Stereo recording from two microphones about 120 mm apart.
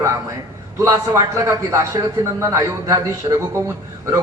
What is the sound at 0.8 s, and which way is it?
A man's voice, 25° right (ahead or behind).